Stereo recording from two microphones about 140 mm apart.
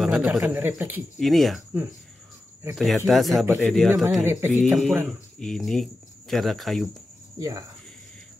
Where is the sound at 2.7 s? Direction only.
Centre (ahead or behind).